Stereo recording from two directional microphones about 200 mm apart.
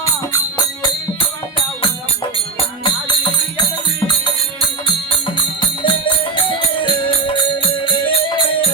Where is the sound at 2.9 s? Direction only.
25° left (ahead or behind).